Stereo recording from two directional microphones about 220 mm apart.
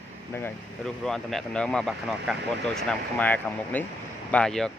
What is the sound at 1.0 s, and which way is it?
Speech, centre (ahead or behind).